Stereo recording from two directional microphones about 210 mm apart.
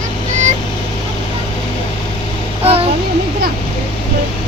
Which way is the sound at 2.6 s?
25° right (ahead or behind).